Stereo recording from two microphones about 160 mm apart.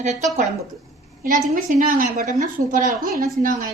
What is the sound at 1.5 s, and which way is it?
A woman's voice, 60° right (ahead or behind).